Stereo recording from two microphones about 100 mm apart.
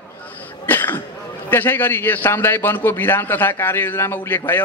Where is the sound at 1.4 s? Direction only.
20° left (ahead or behind).